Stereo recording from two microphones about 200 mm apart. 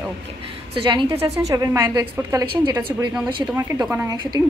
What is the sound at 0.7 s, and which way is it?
A woman's voice, 25° right (ahead or behind).